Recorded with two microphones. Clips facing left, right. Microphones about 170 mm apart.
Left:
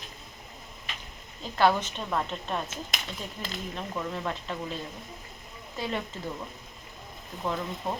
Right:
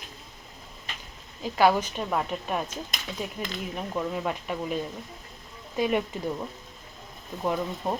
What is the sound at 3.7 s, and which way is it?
Speech, 10° right (ahead or behind).